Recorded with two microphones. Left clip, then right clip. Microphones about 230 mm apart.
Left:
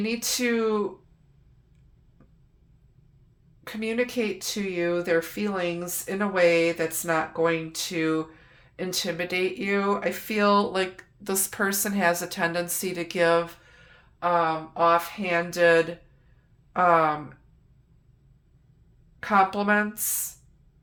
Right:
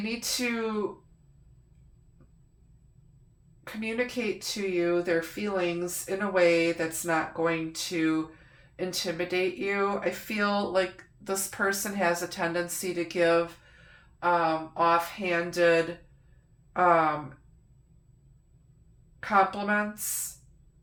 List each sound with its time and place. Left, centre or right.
0.0 s speech: left
3.6 s speech: left
19.2 s speech: left